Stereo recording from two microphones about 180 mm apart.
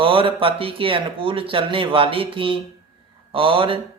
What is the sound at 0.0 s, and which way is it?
Speech, 30° right (ahead or behind).